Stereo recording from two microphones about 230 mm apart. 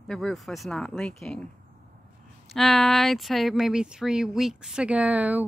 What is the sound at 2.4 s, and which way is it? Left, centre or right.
Speech, centre.